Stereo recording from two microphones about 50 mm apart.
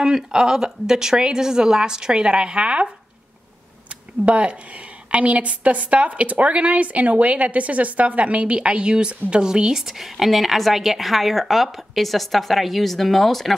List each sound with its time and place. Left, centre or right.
0.0 s speech: centre
4.3 s a woman's voice: right; by 13.6 s centre